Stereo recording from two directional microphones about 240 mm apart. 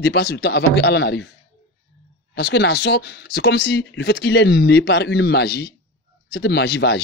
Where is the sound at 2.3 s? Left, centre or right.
Left.